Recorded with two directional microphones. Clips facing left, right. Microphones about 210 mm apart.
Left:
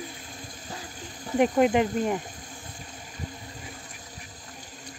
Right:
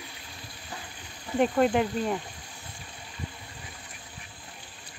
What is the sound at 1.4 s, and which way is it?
Speech, 15° left (ahead or behind).